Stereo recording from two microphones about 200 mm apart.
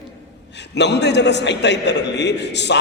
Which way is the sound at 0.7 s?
60° left (ahead or behind).